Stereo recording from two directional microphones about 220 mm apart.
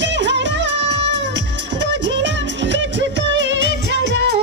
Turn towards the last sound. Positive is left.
turn(degrees=-55)  # may be behind; listen again after turning